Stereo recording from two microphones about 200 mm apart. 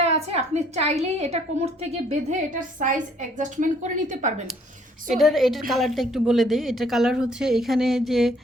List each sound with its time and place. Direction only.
0.0 s a woman's voice: 30° right (ahead or behind)
5.1 s a woman's voice: centre (ahead or behind)